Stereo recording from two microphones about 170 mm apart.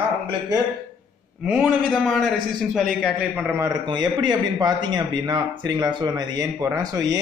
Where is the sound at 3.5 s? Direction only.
20° right (ahead or behind).